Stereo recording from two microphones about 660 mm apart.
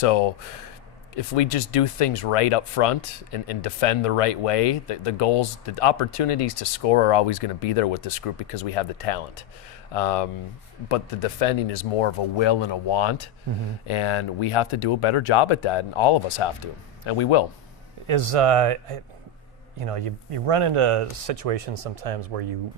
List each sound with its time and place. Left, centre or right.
0.0 s speech: left
18.0 s speech: right